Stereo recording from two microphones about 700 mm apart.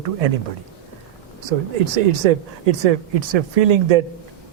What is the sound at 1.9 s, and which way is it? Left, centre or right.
Speech, right.